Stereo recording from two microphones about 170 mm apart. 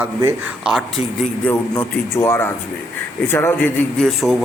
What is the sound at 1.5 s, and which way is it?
A man's voice, 10° left (ahead or behind).